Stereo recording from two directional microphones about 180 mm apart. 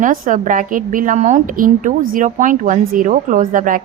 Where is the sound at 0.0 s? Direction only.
45° right (ahead or behind).